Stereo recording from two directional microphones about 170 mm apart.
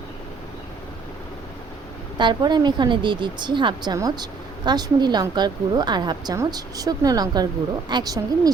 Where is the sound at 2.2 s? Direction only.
25° right (ahead or behind).